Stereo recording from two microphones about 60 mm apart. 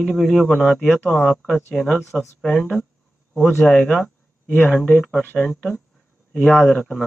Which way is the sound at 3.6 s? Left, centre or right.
Centre.